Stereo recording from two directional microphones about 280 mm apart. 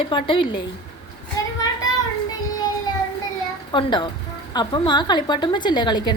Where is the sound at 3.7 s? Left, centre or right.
Centre.